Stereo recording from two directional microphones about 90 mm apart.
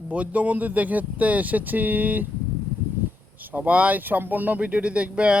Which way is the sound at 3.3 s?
20° right (ahead or behind).